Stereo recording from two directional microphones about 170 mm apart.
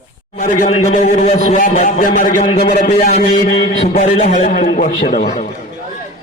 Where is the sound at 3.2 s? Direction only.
70° left (ahead or behind).